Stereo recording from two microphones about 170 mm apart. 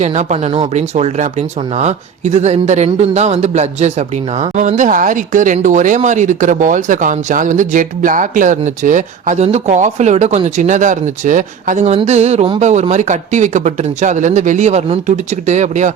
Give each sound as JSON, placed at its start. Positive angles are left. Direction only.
{"t": 0.0, "sound": "speech", "side_deg": -40}